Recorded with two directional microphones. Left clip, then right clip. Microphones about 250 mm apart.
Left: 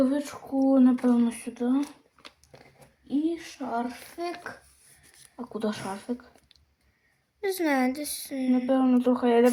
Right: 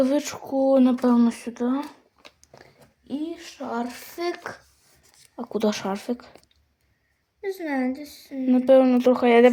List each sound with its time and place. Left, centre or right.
0.0 s speech: right
3.3 s speech: right
7.4 s a woman's voice: left
8.4 s speech: right